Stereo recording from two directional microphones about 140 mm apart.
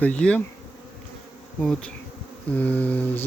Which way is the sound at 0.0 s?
10° left (ahead or behind).